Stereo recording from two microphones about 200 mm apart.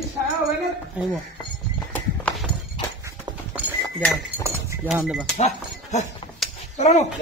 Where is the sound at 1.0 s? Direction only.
5° right (ahead or behind).